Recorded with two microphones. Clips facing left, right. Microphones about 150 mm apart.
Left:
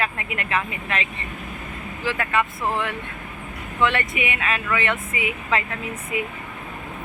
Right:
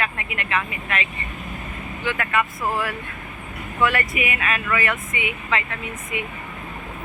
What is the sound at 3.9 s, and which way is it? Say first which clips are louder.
Speech: right 1 dB; 25° left (ahead or behind).